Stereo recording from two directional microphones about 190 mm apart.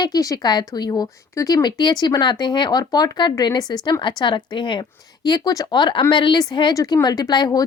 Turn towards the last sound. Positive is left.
turn(degrees=20)  # may be behind; listen again after turning